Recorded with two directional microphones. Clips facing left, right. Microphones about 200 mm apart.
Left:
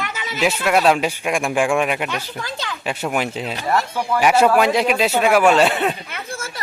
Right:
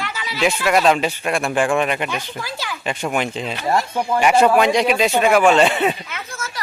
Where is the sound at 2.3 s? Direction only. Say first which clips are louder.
Even; 5° right (ahead or behind).